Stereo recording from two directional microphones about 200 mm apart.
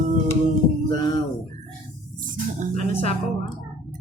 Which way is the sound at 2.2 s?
40° right (ahead or behind).